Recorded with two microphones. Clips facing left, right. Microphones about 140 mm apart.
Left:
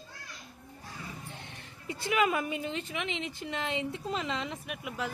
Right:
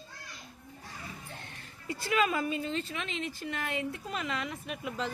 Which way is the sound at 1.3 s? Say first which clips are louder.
Left 1 dB; 20° left (ahead or behind).